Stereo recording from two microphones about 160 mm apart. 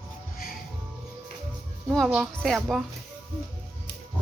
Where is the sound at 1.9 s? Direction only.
5° right (ahead or behind).